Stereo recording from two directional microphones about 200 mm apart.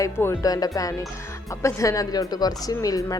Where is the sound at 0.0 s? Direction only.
15° left (ahead or behind).